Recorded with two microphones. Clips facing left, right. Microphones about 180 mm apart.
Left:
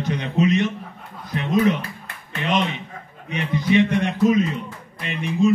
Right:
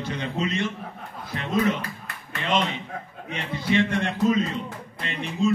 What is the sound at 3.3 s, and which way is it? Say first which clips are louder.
A man's voice: left 5 dB; 15° left (ahead or behind).